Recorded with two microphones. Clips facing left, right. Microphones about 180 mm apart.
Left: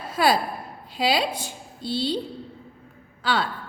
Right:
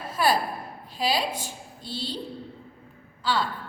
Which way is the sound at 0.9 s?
70° left (ahead or behind).